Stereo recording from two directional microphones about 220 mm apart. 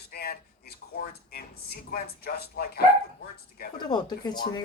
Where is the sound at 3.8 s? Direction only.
20° left (ahead or behind).